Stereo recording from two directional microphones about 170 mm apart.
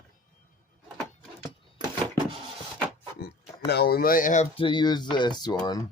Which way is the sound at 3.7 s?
70° left (ahead or behind).